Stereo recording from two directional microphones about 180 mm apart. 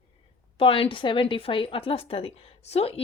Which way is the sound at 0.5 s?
30° left (ahead or behind).